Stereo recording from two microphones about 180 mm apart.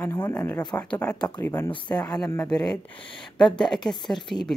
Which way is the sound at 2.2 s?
10° left (ahead or behind).